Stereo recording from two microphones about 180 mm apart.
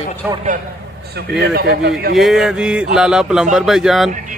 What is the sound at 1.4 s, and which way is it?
Speech, 65° right (ahead or behind).